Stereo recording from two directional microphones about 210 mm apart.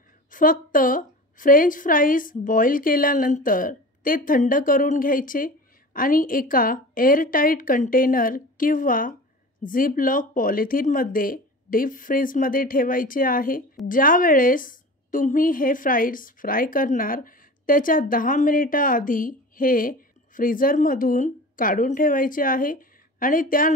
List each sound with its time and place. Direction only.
0.3 s a woman's voice: 40° left (ahead or behind)